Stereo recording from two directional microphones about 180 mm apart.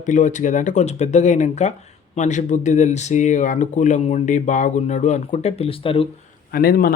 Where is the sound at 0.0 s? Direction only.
45° left (ahead or behind).